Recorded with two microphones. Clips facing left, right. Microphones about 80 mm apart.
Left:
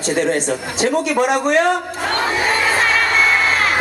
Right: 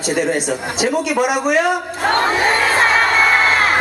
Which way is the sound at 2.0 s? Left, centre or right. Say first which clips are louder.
Right 4 dB; right.